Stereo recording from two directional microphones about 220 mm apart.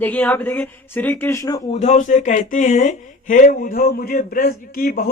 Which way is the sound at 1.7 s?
30° left (ahead or behind).